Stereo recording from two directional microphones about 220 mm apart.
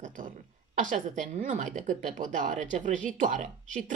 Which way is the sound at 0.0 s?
35° right (ahead or behind).